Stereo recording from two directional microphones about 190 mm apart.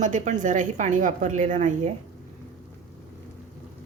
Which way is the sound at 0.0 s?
40° right (ahead or behind).